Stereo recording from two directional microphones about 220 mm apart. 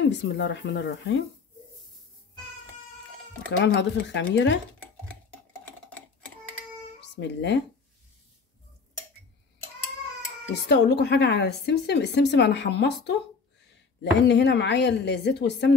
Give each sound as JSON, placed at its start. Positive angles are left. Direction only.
{"t": 0.0, "sound": "speech", "side_deg": 55}
{"t": 3.5, "sound": "speech", "side_deg": 50}
{"t": 7.0, "sound": "speech", "side_deg": 50}
{"t": 10.5, "sound": "speech", "side_deg": 50}
{"t": 14.2, "sound": "speech", "side_deg": 50}